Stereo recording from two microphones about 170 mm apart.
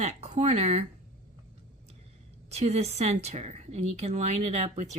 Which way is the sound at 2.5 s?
40° right (ahead or behind).